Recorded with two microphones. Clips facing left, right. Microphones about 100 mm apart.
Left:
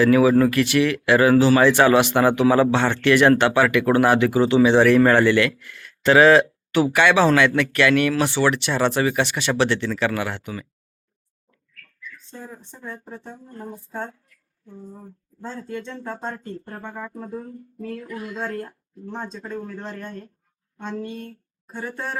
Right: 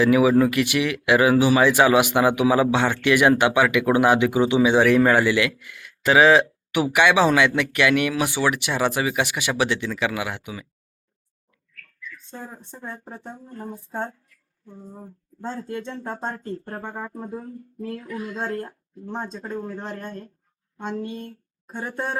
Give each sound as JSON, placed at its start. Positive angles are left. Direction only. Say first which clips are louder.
{"t": 0.0, "sound": "speech", "louder": "left 1 dB", "side_deg": -10}
{"t": 12.4, "sound": "speech", "louder": "even", "side_deg": -25}
{"t": 14.9, "sound": "speech", "louder": "right 1 dB", "side_deg": -15}
{"t": 16.4, "sound": "speech", "louder": "right 2 dB", "side_deg": -35}
{"t": 17.2, "sound": "speech", "louder": "even", "side_deg": -10}
{"t": 20.7, "sound": "speech", "louder": "right 1 dB", "side_deg": -15}